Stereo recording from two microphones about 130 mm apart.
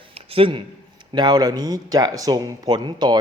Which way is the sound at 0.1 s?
45° right (ahead or behind).